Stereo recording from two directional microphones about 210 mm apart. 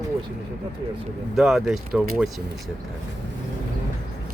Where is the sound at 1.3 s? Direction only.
Centre (ahead or behind).